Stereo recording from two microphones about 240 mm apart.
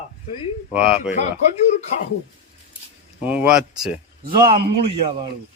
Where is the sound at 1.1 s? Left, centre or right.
Left.